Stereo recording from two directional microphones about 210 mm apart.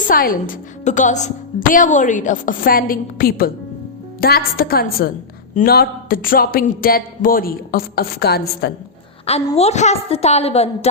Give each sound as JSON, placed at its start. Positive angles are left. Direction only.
{"t": 0.1, "sound": "a woman's voice", "side_deg": 45}
{"t": 9.6, "sound": "a woman's voice", "side_deg": 30}